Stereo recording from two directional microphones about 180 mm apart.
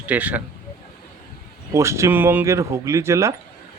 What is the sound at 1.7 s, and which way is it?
A man's voice, 15° right (ahead or behind).